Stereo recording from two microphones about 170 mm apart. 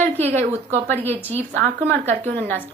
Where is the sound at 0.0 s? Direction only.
10° left (ahead or behind).